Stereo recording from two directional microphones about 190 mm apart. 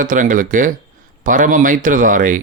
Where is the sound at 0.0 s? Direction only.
45° right (ahead or behind).